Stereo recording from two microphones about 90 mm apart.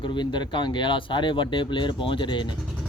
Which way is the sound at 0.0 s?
60° left (ahead or behind).